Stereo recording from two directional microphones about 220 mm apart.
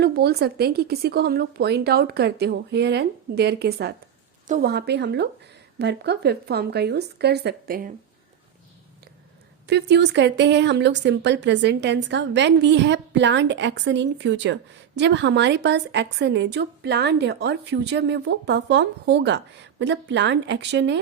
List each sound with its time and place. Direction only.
0.0 s speech: 45° right (ahead or behind)
9.6 s speech: 50° right (ahead or behind)